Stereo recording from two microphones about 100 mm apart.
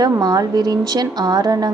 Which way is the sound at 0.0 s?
40° right (ahead or behind).